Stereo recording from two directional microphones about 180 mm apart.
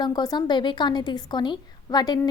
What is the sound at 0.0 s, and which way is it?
A woman's voice, 20° left (ahead or behind).